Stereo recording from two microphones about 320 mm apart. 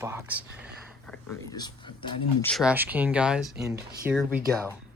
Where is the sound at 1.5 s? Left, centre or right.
Centre.